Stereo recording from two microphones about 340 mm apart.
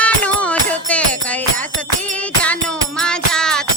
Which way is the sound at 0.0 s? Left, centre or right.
Centre.